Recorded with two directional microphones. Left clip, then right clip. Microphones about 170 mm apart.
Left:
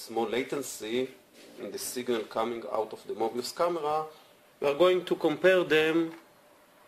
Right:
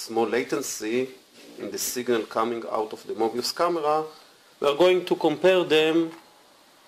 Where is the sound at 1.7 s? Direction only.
25° right (ahead or behind).